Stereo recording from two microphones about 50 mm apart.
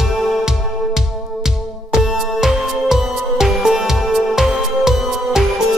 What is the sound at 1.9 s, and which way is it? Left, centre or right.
Music, centre.